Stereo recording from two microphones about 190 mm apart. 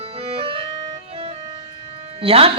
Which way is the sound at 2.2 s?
30° right (ahead or behind).